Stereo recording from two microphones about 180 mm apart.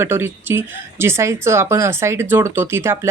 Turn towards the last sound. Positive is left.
turn(degrees=-15)  # may be behind; listen again after turning